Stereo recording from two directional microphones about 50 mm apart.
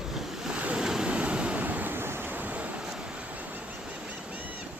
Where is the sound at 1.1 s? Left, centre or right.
Right.